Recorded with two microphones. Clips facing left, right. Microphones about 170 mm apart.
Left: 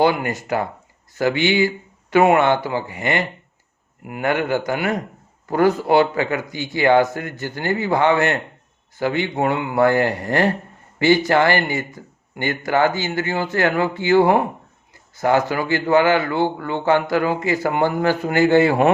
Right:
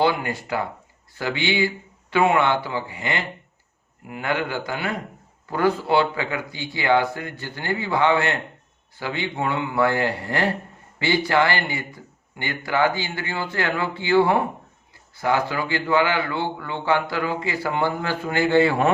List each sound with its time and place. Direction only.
0.0 s speech: 45° left (ahead or behind)